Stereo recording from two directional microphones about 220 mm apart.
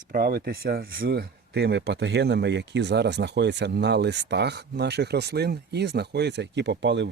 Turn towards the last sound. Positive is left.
turn(degrees=-55)  # may be behind; listen again after turning